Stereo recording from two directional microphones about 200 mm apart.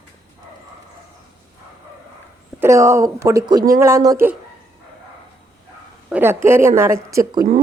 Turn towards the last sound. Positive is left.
turn(degrees=-15)  # may be behind; listen again after turning